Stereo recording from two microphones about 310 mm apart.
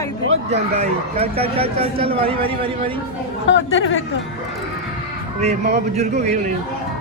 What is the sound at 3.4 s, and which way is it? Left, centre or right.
Speech, left.